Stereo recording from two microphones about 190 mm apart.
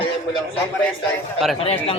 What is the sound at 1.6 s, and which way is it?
Speech, 30° left (ahead or behind).